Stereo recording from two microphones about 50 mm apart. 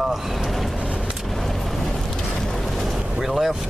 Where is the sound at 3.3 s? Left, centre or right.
Centre.